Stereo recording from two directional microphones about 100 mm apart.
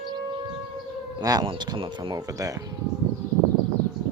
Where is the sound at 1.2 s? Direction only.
40° right (ahead or behind).